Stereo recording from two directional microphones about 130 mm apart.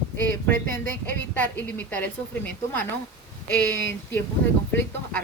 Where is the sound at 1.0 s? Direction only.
10° left (ahead or behind).